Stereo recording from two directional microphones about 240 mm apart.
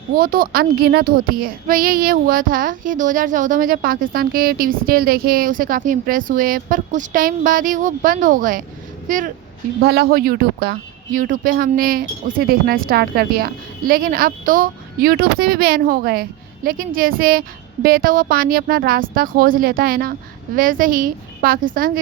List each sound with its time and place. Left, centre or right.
0.2 s speech: right